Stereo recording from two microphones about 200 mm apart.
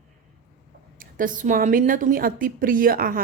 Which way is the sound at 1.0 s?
45° right (ahead or behind).